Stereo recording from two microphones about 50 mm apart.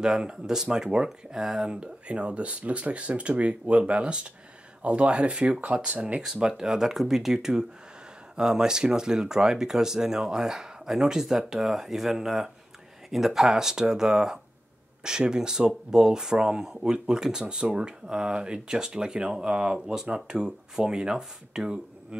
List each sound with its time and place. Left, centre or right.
0.0 s speech: centre
6.3 s speech: centre